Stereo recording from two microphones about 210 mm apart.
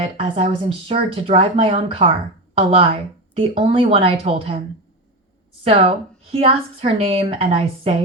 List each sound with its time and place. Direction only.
0.0 s speech: 25° right (ahead or behind)
5.6 s speech: 25° right (ahead or behind)